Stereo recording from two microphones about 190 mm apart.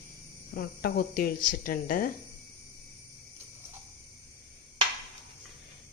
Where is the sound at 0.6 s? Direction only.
50° left (ahead or behind).